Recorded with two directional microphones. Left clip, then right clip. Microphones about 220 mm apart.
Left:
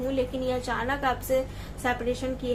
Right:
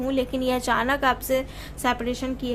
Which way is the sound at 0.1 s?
50° right (ahead or behind).